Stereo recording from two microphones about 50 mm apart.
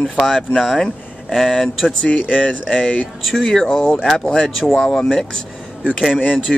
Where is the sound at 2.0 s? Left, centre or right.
Left.